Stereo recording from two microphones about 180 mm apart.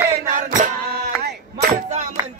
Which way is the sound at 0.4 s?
45° right (ahead or behind).